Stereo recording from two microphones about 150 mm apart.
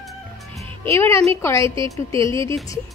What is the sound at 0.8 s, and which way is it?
A woman's voice, 20° left (ahead or behind).